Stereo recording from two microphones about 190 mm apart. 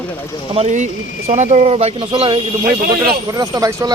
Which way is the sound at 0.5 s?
35° right (ahead or behind).